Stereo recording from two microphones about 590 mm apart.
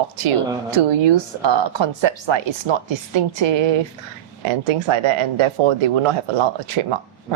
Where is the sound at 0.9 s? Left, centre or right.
Right.